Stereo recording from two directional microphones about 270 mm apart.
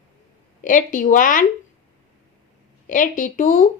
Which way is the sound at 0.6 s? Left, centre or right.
Left.